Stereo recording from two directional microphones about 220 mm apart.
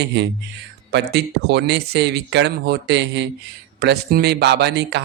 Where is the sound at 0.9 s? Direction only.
50° right (ahead or behind).